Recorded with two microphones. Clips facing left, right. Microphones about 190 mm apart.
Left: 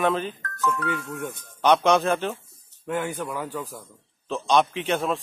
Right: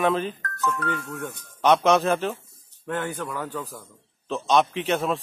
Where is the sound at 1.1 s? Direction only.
20° left (ahead or behind).